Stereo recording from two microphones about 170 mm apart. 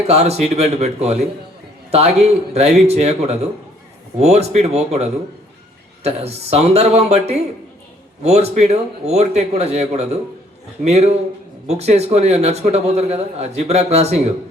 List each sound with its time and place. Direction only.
0.1 s a man's voice: 40° right (ahead or behind)